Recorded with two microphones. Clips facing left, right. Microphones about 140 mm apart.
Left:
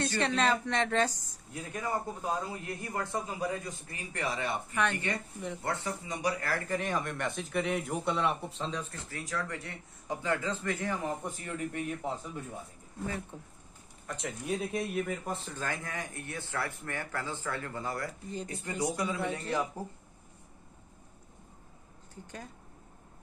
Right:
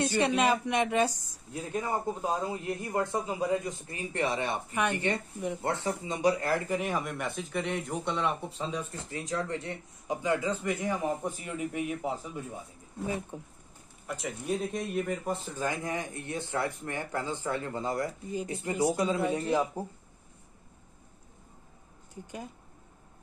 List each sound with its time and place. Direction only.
0.0 s speech: 15° right (ahead or behind)
1.5 s a man's voice: 25° right (ahead or behind); by 8.8 s 5° right (ahead or behind)
8.9 s speech: 20° right (ahead or behind)
14.0 s speech: centre (ahead or behind)
15.5 s a man's voice: 15° right (ahead or behind)
22.1 s speech: 15° right (ahead or behind)